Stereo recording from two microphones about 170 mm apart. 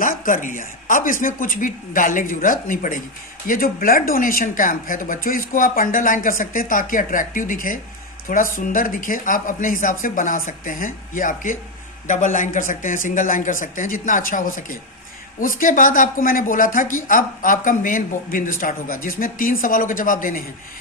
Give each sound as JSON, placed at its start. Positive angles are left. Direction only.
{"t": 0.0, "sound": "speech", "side_deg": 50}